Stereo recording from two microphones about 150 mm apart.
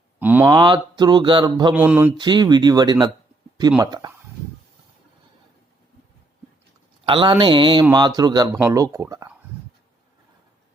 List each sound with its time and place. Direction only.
0.2 s a sound: 10° right (ahead or behind)
0.5 s speech: 30° right (ahead or behind)
1.7 s mantra: 10° right (ahead or behind)
2.1 s speech: 30° right (ahead or behind)
7.0 s speech: 35° right (ahead or behind)